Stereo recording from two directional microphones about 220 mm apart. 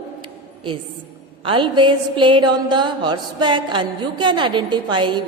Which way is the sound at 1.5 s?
25° right (ahead or behind).